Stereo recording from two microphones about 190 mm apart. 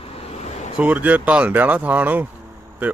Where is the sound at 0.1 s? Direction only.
30° left (ahead or behind).